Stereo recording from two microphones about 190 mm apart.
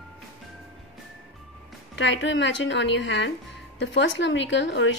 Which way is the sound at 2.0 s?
70° left (ahead or behind).